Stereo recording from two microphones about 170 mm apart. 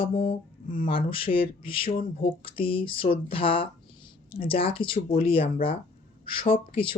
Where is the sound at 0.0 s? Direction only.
30° left (ahead or behind).